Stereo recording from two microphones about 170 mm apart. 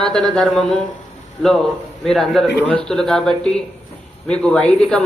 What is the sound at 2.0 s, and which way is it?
A man's voice, centre (ahead or behind).